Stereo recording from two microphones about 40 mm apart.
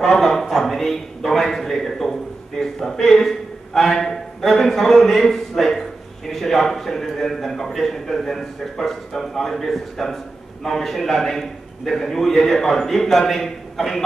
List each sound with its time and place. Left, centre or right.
0.0 s a man's voice: centre